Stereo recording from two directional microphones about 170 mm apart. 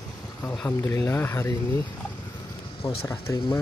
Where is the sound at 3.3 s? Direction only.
20° left (ahead or behind).